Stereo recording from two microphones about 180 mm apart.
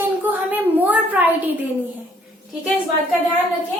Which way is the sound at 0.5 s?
10° right (ahead or behind).